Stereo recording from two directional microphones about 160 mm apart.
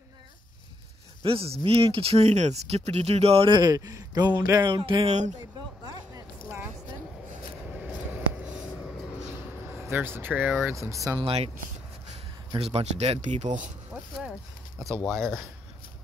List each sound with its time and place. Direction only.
1.2 s speech: 35° right (ahead or behind)
7.7 s vehicle: 5° right (ahead or behind)
9.7 s speech: 15° right (ahead or behind)
11.1 s speech: 35° right (ahead or behind)
12.5 s speech: 40° right (ahead or behind)